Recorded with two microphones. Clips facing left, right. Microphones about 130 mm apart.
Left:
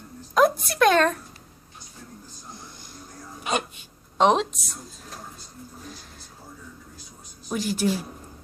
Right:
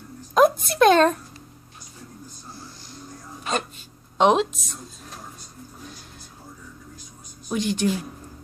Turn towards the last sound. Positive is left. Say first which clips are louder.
# right 2 dB
turn(degrees=5)  # may be behind; listen again after turning